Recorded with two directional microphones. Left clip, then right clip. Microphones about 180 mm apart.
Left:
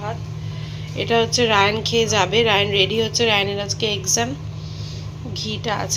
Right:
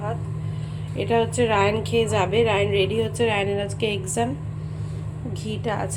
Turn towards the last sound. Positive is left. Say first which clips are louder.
# left 3 dB
turn(degrees=-5)  # may be behind; listen again after turning